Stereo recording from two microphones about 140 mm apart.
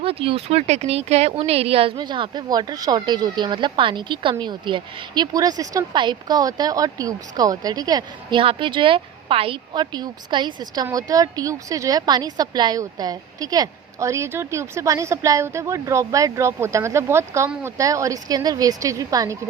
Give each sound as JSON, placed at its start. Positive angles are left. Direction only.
{"t": 0.0, "sound": "a woman's voice", "side_deg": -45}